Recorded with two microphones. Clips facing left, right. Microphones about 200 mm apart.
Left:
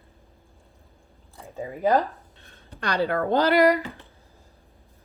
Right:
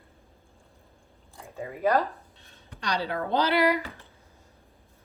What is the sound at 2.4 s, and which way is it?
Speech, 55° left (ahead or behind).